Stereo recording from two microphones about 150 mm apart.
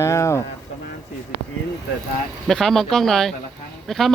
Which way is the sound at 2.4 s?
Centre (ahead or behind).